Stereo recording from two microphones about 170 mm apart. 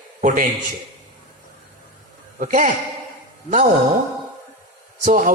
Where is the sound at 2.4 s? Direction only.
50° right (ahead or behind).